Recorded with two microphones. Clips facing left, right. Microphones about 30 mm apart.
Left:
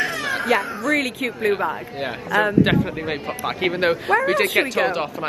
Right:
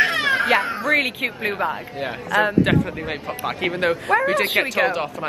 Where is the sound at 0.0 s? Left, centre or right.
Right.